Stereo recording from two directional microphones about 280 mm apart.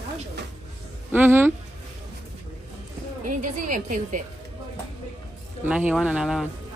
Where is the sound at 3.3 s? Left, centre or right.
Right.